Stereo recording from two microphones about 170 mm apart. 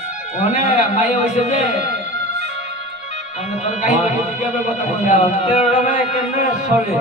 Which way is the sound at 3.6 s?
45° left (ahead or behind).